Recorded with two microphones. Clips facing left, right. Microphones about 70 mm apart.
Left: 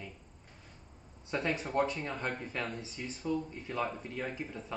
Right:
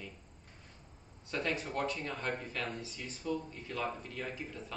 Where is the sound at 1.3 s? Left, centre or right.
Left.